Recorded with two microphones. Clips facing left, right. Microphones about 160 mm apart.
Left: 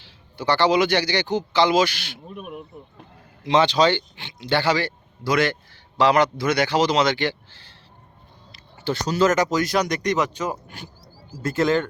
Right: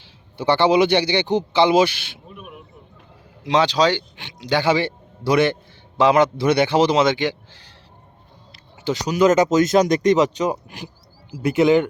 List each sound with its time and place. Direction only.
0.3 s speech: 25° right (ahead or behind)
3.4 s speech: 10° right (ahead or behind)
8.8 s speech: 15° right (ahead or behind)